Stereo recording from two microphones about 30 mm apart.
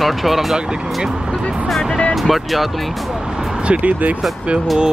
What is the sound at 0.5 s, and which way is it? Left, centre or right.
Speech, right.